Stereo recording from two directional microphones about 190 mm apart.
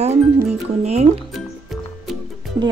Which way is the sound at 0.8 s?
35° right (ahead or behind).